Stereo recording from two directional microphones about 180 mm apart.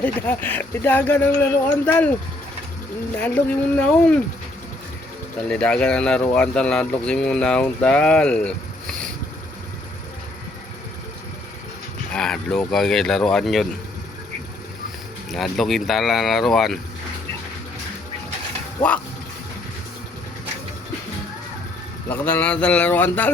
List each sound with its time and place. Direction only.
0.0 s speech: 10° left (ahead or behind)
3.2 s speech: 10° left (ahead or behind)
5.4 s speech: 5° left (ahead or behind)
12.1 s speech: 5° left (ahead or behind)
15.3 s speech: centre (ahead or behind)
18.8 s speech: 25° left (ahead or behind)
22.1 s speech: 10° left (ahead or behind)